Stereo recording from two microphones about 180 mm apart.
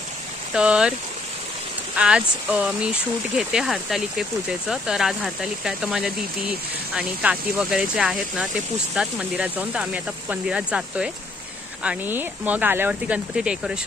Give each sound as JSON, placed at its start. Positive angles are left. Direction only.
{"t": 0.5, "sound": "speech", "side_deg": -5}
{"t": 2.0, "sound": "speech", "side_deg": -5}